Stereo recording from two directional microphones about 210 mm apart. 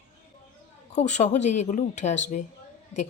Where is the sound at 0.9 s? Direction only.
35° left (ahead or behind).